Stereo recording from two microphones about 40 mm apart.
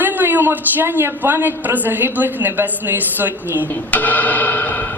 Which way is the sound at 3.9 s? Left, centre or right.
Left.